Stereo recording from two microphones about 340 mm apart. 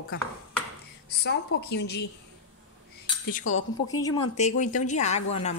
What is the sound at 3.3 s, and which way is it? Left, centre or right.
Speech, left.